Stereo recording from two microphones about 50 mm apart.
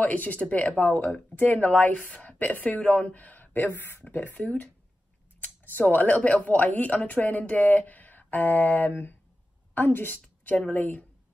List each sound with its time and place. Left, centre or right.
0.0 s speech: left